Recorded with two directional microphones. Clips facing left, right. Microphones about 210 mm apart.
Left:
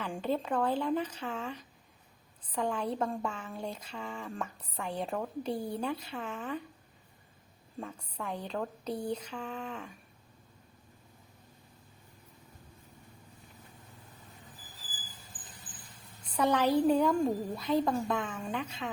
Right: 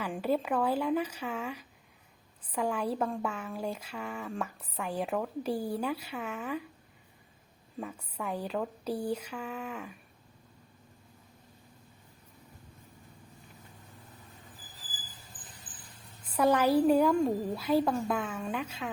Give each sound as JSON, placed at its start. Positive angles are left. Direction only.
{"t": 0.0, "sound": "speech", "side_deg": -10}
{"t": 7.8, "sound": "speech", "side_deg": -10}
{"t": 16.2, "sound": "speech", "side_deg": -5}